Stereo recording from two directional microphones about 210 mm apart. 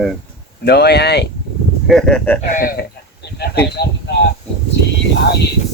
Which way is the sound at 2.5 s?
45° left (ahead or behind).